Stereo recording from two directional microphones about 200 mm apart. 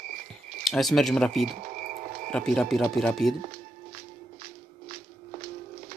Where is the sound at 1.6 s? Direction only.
40° right (ahead or behind).